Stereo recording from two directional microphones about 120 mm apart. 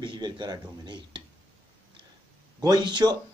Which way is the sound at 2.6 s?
35° right (ahead or behind).